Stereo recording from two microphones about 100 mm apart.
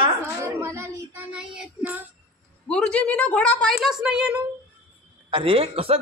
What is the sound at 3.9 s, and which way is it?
Speech, 10° right (ahead or behind).